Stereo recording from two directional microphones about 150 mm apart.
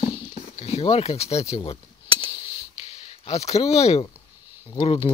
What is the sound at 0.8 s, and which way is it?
Speech, 40° left (ahead or behind).